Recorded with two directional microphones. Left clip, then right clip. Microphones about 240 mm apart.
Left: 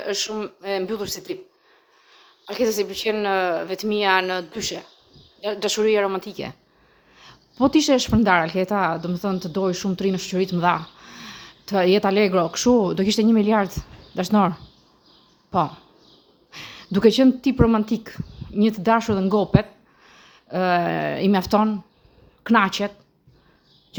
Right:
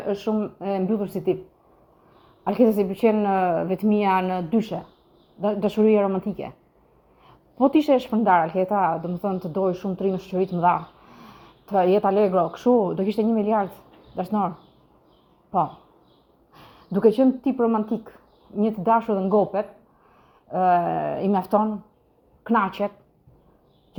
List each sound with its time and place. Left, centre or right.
0.3 s speech: left
2.5 s a woman's voice: centre
16.5 s speech: centre